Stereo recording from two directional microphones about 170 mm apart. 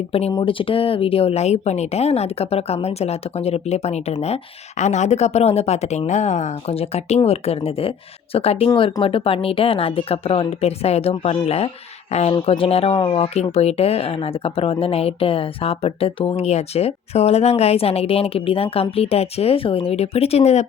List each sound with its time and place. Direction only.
0.1 s speech: 35° left (ahead or behind)